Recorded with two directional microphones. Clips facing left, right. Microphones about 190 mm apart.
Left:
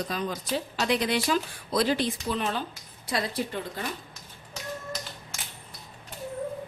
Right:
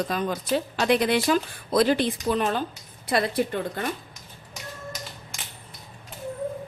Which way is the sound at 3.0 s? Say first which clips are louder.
Right 6 dB; 60° right (ahead or behind).